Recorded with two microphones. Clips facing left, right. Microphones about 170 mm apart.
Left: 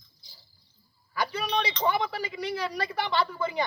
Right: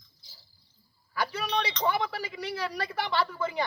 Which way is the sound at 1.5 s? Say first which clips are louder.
Left 2 dB; 10° left (ahead or behind).